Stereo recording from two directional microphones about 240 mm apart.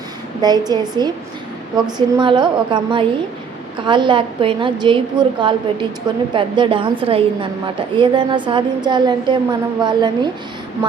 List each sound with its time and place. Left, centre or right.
0.4 s a woman's voice: centre